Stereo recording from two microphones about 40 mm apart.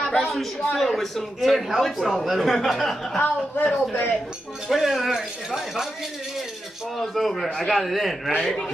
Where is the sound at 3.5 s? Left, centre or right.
Left.